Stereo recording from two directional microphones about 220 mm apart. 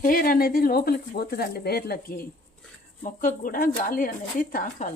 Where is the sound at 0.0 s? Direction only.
40° left (ahead or behind).